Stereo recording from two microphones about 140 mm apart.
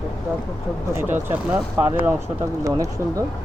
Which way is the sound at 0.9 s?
15° right (ahead or behind).